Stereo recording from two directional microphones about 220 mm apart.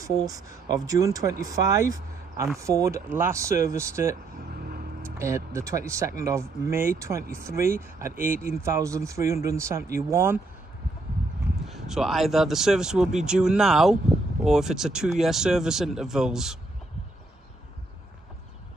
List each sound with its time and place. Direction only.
0.0 s speech: 15° right (ahead or behind)
4.5 s vehicle: 40° right (ahead or behind)
5.2 s speech: 15° right (ahead or behind)
8.2 s speech: 40° right (ahead or behind)
8.6 s speech: 15° right (ahead or behind)
11.6 s speech: centre (ahead or behind)